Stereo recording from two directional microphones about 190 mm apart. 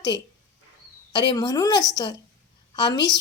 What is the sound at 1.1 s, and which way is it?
A woman's voice, 25° left (ahead or behind).